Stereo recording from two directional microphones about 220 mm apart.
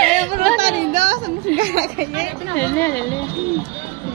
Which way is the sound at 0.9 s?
35° right (ahead or behind).